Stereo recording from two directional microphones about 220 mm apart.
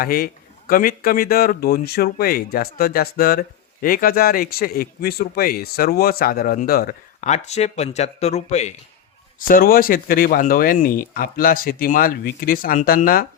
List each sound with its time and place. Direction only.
0.0 s speech: 40° left (ahead or behind)